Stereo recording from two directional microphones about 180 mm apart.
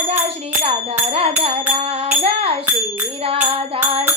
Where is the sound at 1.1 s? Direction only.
30° right (ahead or behind).